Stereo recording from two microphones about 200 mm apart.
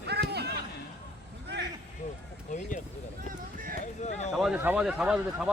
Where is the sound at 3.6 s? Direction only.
45° right (ahead or behind).